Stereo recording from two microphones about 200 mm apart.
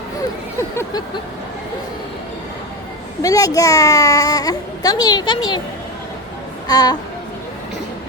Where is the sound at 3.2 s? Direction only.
15° left (ahead or behind).